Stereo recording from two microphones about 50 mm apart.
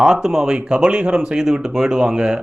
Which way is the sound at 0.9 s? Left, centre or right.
Right.